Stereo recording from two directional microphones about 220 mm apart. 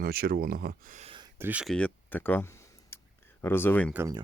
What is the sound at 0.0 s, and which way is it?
Speech, 45° right (ahead or behind).